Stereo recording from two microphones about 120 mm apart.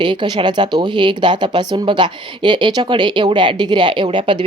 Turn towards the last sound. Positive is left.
turn(degrees=-45)  # may be behind; listen again after turning